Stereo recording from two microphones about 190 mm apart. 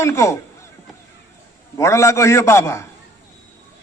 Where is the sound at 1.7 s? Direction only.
15° left (ahead or behind).